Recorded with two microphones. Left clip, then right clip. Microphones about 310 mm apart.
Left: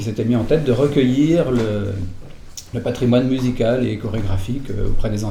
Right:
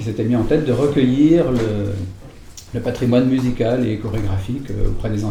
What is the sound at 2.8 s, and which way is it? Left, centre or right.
Speech, left.